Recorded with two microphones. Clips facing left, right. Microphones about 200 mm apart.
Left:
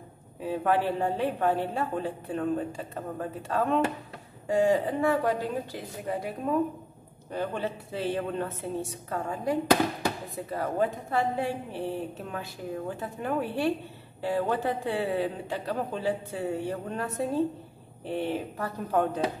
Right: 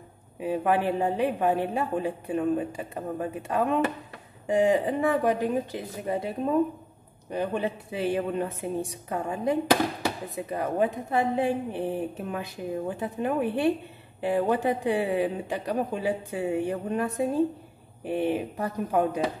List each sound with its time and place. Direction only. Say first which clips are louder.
0.4 s a woman's voice: right 1 dB; 15° right (ahead or behind)